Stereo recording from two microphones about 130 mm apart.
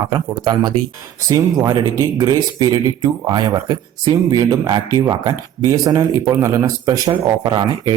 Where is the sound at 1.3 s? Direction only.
35° right (ahead or behind).